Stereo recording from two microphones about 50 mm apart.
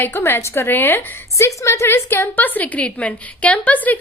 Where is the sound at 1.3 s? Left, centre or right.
Left.